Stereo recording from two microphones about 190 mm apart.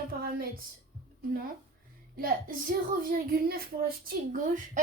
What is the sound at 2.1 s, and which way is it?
A woman's voice, 50° right (ahead or behind).